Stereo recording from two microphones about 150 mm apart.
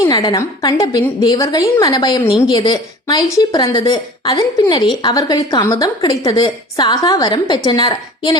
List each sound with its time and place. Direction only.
0.0 s a woman's voice: 25° left (ahead or behind)